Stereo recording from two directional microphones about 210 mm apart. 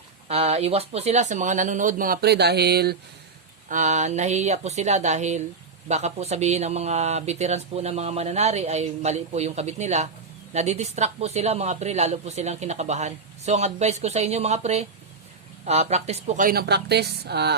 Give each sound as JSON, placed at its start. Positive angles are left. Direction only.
{"t": 0.3, "sound": "speech", "side_deg": -30}
{"t": 3.7, "sound": "a woman's voice", "side_deg": -35}